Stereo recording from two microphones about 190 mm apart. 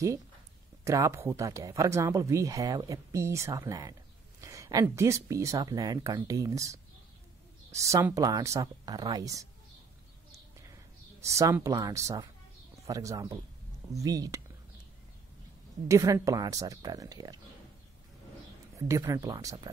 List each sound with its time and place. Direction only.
0.8 s speech: 15° right (ahead or behind)
11.1 s speech: 15° right (ahead or behind)
15.9 s speech: 15° right (ahead or behind)
18.8 s speech: 15° right (ahead or behind)